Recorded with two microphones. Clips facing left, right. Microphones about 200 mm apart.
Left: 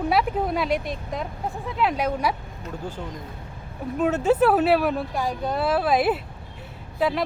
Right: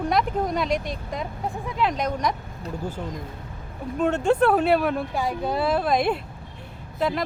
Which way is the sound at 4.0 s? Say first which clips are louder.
Left 1 dB; 5° left (ahead or behind).